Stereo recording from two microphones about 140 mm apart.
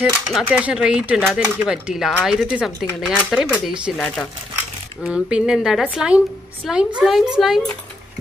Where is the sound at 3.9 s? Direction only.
5° left (ahead or behind).